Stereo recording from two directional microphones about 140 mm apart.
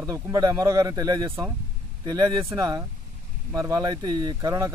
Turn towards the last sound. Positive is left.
turn(degrees=-25)  # may be behind; listen again after turning